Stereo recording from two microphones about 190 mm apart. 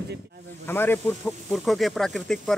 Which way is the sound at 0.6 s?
10° left (ahead or behind).